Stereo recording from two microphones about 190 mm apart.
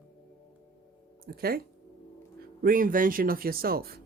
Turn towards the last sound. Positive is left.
turn(degrees=-55)  # may be behind; listen again after turning